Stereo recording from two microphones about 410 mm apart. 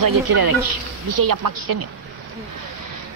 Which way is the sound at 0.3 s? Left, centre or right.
Right.